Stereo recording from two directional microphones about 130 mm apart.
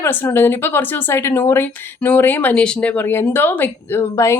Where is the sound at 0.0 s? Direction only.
20° left (ahead or behind).